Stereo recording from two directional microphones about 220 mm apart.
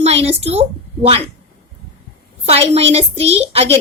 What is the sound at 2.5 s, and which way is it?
A woman's voice, 30° right (ahead or behind).